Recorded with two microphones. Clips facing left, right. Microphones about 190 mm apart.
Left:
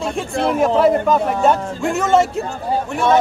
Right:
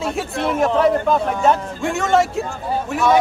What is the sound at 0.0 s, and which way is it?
Speech, centre (ahead or behind).